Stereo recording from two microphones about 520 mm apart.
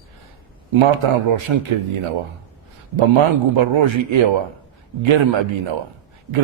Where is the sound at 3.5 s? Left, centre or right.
Right.